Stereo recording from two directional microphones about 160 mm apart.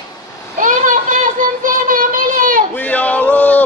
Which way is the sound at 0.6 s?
55° right (ahead or behind).